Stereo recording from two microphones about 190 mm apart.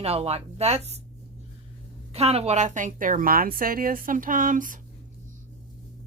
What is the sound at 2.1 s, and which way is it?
A woman's voice, 35° right (ahead or behind).